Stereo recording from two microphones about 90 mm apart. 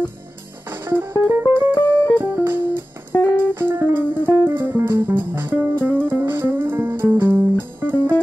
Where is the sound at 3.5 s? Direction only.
25° right (ahead or behind).